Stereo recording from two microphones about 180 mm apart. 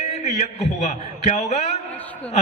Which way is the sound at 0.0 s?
40° left (ahead or behind).